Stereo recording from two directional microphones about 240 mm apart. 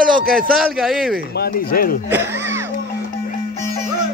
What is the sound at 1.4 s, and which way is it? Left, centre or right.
Speech, left.